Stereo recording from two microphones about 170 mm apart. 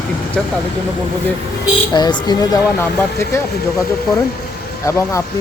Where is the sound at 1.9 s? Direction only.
25° left (ahead or behind).